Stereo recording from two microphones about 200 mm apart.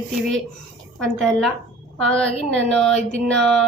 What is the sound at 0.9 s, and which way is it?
Speech, centre (ahead or behind).